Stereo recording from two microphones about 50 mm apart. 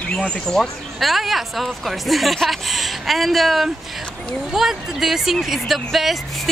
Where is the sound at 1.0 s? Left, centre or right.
Centre.